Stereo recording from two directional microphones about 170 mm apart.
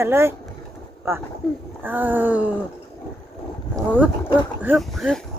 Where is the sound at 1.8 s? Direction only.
10° right (ahead or behind).